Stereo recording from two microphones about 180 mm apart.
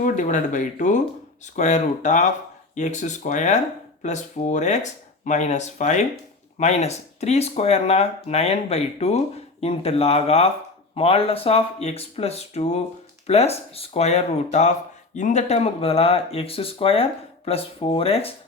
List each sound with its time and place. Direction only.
0.0 s speech: 45° left (ahead or behind)